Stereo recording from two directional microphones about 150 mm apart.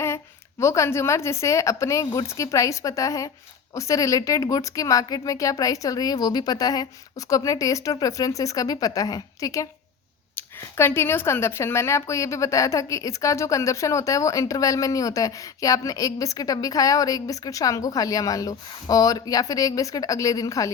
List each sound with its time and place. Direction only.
0.6 s speech: 20° left (ahead or behind)